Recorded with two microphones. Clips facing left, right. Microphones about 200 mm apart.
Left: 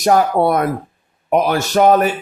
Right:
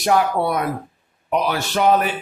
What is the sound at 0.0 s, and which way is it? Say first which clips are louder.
A man's voice: left 5 dB; 45° left (ahead or behind).